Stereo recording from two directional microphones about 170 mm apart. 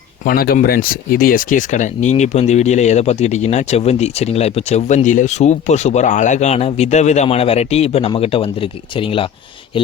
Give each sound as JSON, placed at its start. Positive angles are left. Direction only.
{"t": 0.3, "sound": "speech", "side_deg": 60}